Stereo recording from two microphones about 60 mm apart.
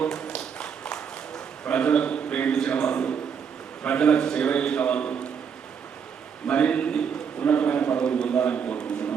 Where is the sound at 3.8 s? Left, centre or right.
Centre.